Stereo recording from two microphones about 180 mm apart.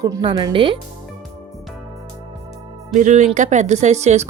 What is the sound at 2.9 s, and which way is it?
Speech, 40° right (ahead or behind).